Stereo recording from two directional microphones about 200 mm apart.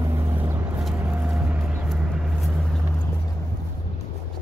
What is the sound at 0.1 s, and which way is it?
Vehicle, 10° right (ahead or behind).